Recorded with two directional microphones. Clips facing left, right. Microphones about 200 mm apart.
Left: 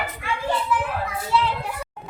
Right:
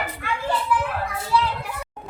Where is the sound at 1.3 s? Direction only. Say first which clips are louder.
Even; 20° left (ahead or behind).